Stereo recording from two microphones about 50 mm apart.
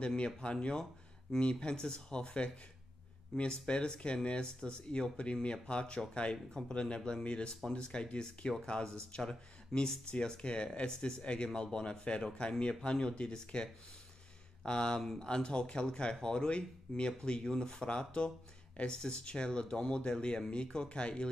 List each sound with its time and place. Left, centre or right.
0.0 s speech: centre